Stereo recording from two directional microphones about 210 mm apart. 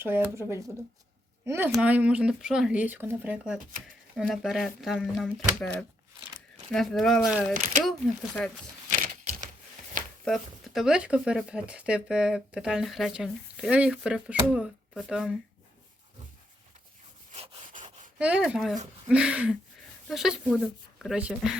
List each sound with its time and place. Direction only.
0.0 s speech: 10° right (ahead or behind)
8.9 s typewriter: 40° right (ahead or behind)
10.2 s speech: centre (ahead or behind)
17.3 s sawing: 30° right (ahead or behind)
17.7 s a sound: 35° right (ahead or behind)
18.2 s speech: 5° right (ahead or behind)